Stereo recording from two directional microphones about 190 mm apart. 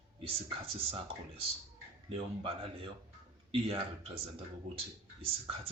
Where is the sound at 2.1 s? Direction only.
30° right (ahead or behind).